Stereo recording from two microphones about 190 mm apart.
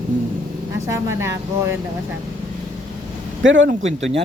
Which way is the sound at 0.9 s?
15° right (ahead or behind).